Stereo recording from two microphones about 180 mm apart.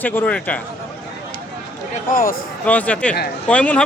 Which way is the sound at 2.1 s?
50° left (ahead or behind).